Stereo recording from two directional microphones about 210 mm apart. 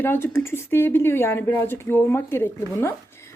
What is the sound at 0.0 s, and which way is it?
Speech, 10° left (ahead or behind).